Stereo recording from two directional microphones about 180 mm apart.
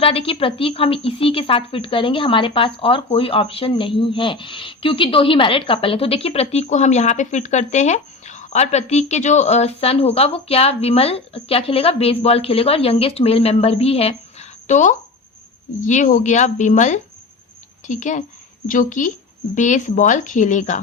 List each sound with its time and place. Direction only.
0.0 s a woman's voice: 30° left (ahead or behind)